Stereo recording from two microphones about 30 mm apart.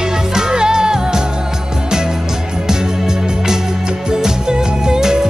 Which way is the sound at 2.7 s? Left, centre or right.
Centre.